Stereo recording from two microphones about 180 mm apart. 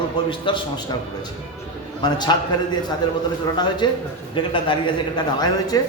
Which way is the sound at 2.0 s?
20° left (ahead or behind).